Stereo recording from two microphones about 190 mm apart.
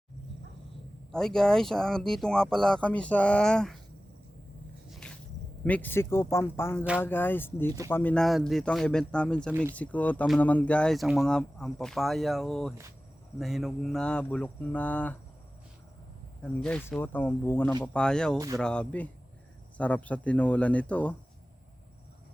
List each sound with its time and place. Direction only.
1.1 s speech: 5° left (ahead or behind)
4.9 s a sound: 5° left (ahead or behind)
5.6 s speech: 10° left (ahead or behind)
9.5 s speech: 10° right (ahead or behind)
9.7 s speech: 10° left (ahead or behind)
16.4 s speech: 5° left (ahead or behind)
18.3 s speech: 20° right (ahead or behind)
18.6 s speech: 5° left (ahead or behind)